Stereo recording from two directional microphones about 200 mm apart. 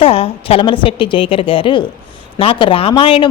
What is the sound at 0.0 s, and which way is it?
A woman's voice, 30° left (ahead or behind).